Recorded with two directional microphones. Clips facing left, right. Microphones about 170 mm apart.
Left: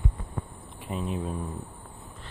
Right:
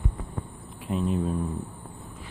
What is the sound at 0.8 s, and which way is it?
Speech, centre (ahead or behind).